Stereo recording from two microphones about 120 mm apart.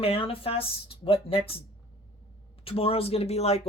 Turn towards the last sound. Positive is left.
turn(degrees=60)  # may be behind; listen again after turning